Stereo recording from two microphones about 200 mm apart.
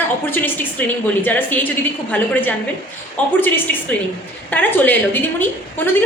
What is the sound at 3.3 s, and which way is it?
A woman's voice, 10° left (ahead or behind).